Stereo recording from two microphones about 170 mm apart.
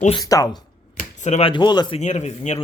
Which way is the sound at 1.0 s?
45° left (ahead or behind).